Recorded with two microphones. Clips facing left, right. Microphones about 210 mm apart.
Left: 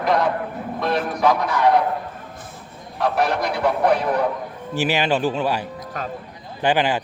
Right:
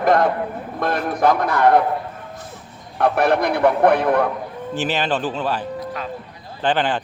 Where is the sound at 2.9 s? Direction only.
55° right (ahead or behind).